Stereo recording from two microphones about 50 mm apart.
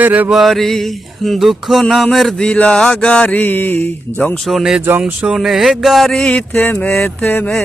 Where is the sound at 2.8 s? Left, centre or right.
Centre.